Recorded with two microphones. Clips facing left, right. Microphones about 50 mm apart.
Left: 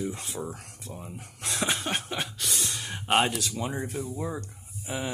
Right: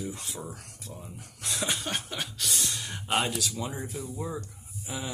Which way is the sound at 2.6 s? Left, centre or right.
Left.